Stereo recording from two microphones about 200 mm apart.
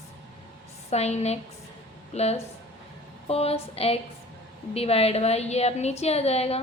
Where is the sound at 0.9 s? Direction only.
35° left (ahead or behind).